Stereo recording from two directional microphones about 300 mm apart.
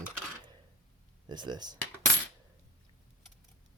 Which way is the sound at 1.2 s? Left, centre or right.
Centre.